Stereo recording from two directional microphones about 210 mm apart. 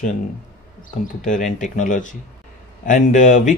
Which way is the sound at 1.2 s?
40° left (ahead or behind).